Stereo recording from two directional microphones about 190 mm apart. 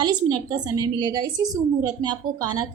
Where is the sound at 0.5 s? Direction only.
20° right (ahead or behind).